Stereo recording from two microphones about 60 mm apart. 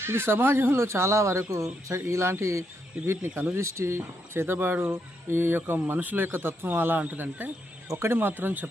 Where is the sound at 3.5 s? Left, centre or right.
Right.